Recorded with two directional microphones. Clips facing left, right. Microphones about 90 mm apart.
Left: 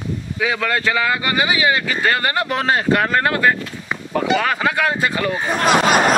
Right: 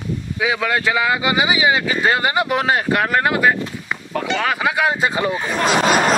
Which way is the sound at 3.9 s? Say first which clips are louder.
Left 5 dB; 5° left (ahead or behind).